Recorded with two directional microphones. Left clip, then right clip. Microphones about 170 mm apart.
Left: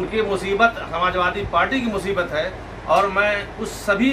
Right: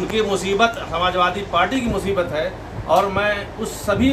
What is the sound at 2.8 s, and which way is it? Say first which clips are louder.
Speech: even; centre (ahead or behind).